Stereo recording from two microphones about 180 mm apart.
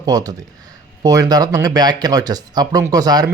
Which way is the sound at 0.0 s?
20° right (ahead or behind).